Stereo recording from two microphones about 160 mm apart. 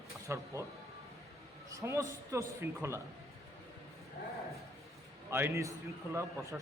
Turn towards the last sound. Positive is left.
turn(degrees=-5)  # may be behind; listen again after turning